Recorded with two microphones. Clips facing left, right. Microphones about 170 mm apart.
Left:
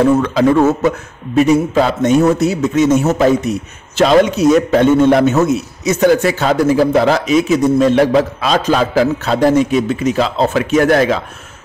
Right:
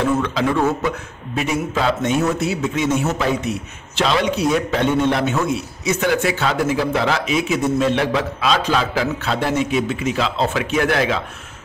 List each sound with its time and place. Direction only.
0.0 s a man's voice: 45° left (ahead or behind)